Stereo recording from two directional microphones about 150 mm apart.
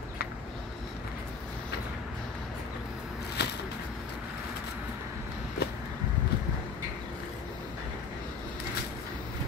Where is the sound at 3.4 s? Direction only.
90° left.